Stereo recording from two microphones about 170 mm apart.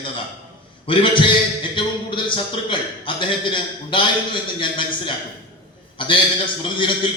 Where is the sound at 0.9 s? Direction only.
30° left (ahead or behind).